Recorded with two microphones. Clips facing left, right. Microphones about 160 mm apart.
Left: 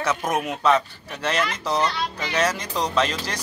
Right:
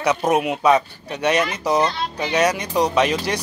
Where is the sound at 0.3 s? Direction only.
15° right (ahead or behind).